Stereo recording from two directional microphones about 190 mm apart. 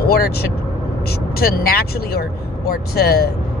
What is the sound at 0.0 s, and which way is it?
Speech, 55° left (ahead or behind).